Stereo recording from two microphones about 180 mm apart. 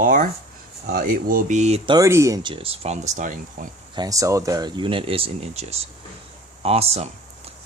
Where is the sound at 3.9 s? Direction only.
20° right (ahead or behind).